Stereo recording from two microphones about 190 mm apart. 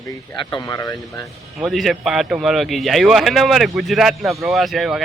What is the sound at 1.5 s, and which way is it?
Speech, centre (ahead or behind).